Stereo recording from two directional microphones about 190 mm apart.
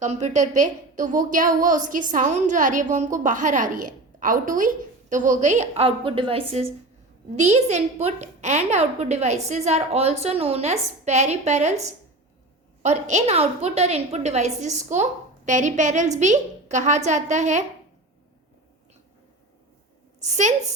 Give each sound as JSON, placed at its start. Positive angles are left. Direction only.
{"t": 0.0, "sound": "a woman's voice", "side_deg": -40}
{"t": 12.8, "sound": "a woman's voice", "side_deg": -35}
{"t": 20.2, "sound": "a woman's voice", "side_deg": -40}